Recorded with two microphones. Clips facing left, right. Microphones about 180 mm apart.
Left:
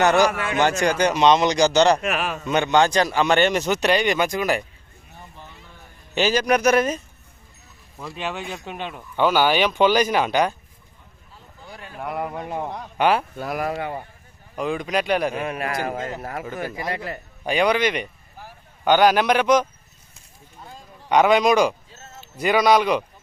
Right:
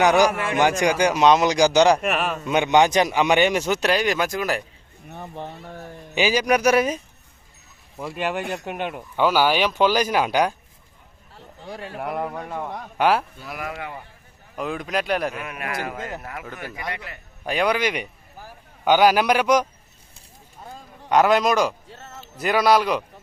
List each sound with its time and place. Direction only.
0.0 s speech: 10° right (ahead or behind)
2.5 s speech: 15° right (ahead or behind)
5.0 s a sound: 65° right (ahead or behind)
6.1 s speech: 10° right (ahead or behind)
8.6 s speech: 10° right (ahead or behind)
11.9 s speech: centre (ahead or behind)
12.4 s a man's voice: 15° left (ahead or behind)
12.7 s speech: 5° right (ahead or behind)
13.3 s speech: 55° left (ahead or behind)
13.6 s a man's voice: 35° left (ahead or behind)
14.5 s speech: centre (ahead or behind)
15.3 s a man's voice: 30° left (ahead or behind)
17.4 s speech: centre (ahead or behind)
21.1 s speech: centre (ahead or behind)